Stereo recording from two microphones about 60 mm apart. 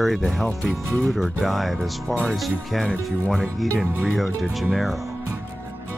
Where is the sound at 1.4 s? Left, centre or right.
Centre.